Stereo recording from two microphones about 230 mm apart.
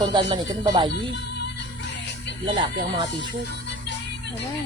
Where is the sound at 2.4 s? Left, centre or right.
Right.